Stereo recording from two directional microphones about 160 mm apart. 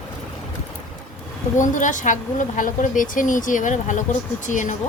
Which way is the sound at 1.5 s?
50° left (ahead or behind).